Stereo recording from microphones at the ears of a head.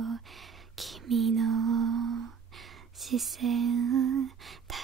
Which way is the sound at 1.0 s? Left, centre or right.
Right.